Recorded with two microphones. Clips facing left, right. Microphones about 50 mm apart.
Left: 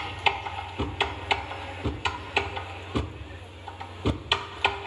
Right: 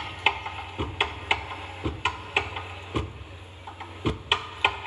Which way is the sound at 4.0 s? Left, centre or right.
Right.